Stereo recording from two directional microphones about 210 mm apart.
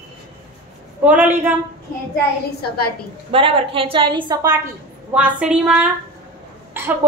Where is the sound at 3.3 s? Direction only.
25° right (ahead or behind).